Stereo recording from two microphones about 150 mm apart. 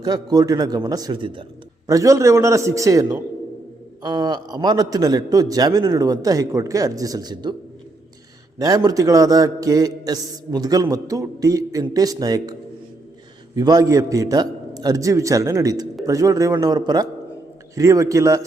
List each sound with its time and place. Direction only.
0.0 s a man's voice: 25° right (ahead or behind)
1.9 s a man's voice: 25° right (ahead or behind)
8.5 s a man's voice: 25° right (ahead or behind)
13.6 s a man's voice: 25° right (ahead or behind)